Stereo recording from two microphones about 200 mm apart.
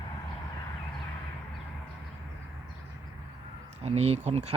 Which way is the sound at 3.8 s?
30° right (ahead or behind).